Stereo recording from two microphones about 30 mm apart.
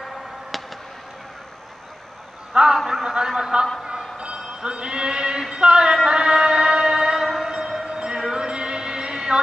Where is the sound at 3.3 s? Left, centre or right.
Right.